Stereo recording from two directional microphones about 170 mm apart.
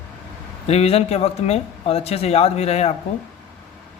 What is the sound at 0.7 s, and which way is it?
Speech, 35° left (ahead or behind).